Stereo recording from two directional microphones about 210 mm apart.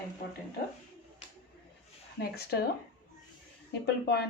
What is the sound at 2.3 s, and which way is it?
Speech, 50° left (ahead or behind).